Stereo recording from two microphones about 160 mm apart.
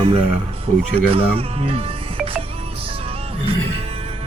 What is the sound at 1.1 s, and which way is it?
Speech, 35° right (ahead or behind).